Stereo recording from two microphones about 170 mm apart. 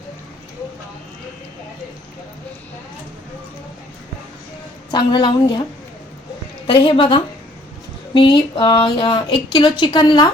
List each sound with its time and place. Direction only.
4.9 s speech: 25° left (ahead or behind)
6.7 s speech: 30° left (ahead or behind)